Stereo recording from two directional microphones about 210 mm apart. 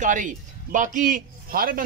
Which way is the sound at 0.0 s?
35° right (ahead or behind).